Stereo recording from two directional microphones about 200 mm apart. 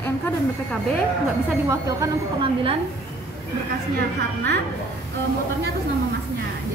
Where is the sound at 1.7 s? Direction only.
20° right (ahead or behind).